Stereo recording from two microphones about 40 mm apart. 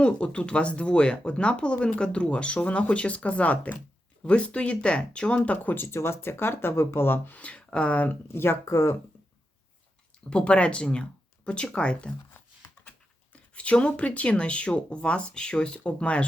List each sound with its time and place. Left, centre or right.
0.0 s speech: left
5.7 s speech: left
7.3 s speech: left
8.3 s speech: left
10.2 s speech: left
13.3 s speech: left